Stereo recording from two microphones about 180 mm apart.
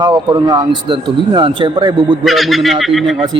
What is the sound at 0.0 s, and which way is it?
Speech, 25° right (ahead or behind).